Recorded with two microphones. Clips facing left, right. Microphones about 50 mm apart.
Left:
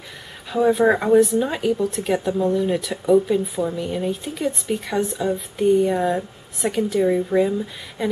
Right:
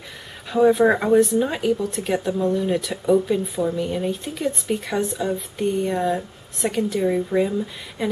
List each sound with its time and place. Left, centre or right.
0.5 s speech: centre